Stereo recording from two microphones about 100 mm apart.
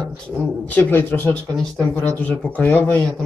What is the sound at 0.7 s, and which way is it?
Speech, 15° left (ahead or behind).